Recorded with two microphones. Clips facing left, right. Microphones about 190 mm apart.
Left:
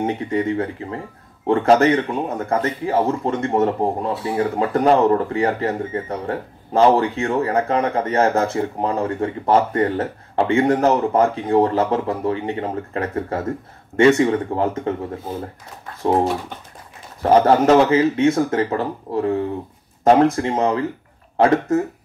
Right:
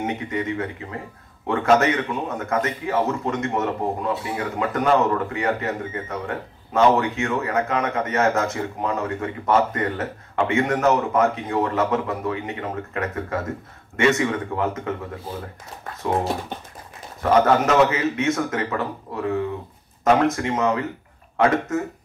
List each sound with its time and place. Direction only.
0.0 s speech: 30° left (ahead or behind)
17.2 s speech: 30° left (ahead or behind)